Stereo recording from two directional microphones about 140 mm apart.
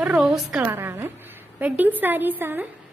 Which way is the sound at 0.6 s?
15° right (ahead or behind).